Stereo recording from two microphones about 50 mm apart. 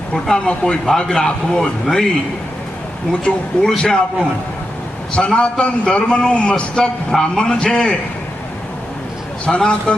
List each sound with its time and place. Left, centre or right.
0.3 s a man's voice: centre
3.1 s a man's voice: left
5.1 s a man's voice: left
9.5 s a man's voice: centre